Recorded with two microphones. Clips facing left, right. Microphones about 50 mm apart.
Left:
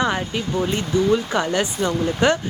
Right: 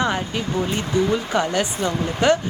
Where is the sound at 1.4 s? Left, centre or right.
Left.